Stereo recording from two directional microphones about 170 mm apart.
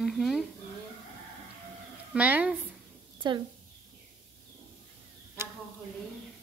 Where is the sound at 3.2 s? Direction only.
25° right (ahead or behind).